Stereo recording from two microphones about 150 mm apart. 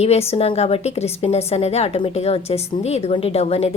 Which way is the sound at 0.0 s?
45° left (ahead or behind).